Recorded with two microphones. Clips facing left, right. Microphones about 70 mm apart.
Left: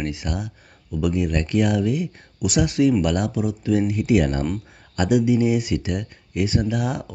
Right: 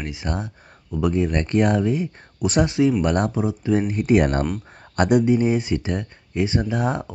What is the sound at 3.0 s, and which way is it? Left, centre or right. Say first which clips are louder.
Speech: right 1 dB; right.